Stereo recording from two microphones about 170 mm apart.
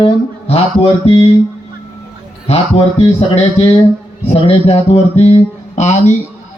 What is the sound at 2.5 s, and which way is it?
Mantra, 40° left (ahead or behind).